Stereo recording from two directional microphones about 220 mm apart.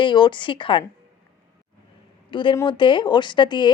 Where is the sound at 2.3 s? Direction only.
20° left (ahead or behind).